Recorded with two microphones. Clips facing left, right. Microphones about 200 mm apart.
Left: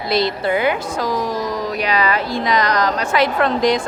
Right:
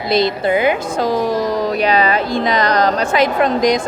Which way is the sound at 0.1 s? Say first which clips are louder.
Right 3 dB; 20° right (ahead or behind).